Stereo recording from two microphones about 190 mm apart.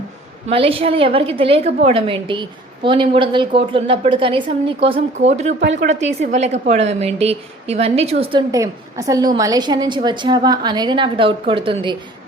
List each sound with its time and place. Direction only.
0.4 s speech: 30° right (ahead or behind)